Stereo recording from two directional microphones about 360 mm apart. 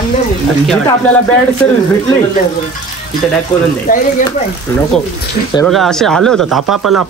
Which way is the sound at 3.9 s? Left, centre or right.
Left.